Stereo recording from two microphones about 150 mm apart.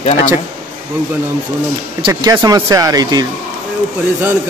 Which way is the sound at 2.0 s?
30° right (ahead or behind).